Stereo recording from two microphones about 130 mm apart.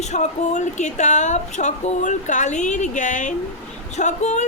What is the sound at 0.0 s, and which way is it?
Speech, 65° left (ahead or behind).